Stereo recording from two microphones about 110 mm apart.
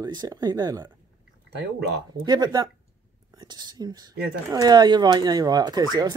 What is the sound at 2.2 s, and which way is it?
Speech, 40° right (ahead or behind).